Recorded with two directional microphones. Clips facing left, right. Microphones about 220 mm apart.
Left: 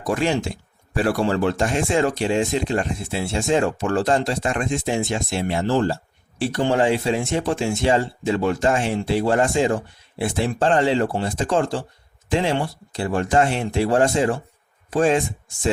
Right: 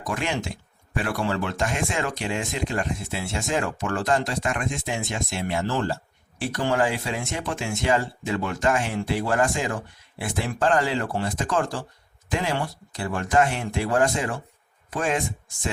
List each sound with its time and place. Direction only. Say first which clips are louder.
0.0 s speech: left 7 dB; 35° left (ahead or behind)